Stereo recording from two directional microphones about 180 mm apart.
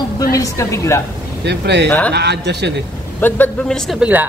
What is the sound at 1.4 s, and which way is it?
Speech, 70° right (ahead or behind).